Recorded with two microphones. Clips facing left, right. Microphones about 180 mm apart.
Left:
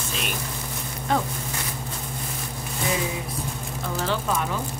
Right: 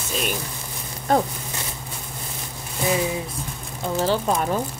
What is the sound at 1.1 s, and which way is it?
Speech, 45° right (ahead or behind).